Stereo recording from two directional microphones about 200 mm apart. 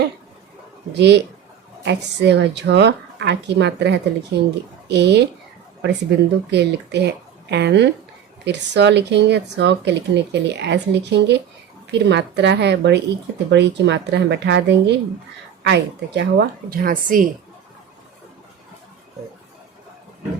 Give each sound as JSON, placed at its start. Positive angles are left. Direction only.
{"t": 0.9, "sound": "a woman's voice", "side_deg": -60}